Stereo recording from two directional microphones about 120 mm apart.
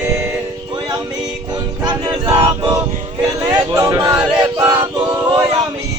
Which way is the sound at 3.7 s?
25° right (ahead or behind).